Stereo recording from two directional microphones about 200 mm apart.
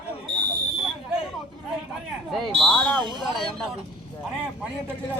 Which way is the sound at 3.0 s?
20° right (ahead or behind).